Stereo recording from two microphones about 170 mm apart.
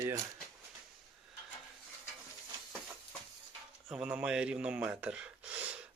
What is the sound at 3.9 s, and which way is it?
Speech, 5° right (ahead or behind).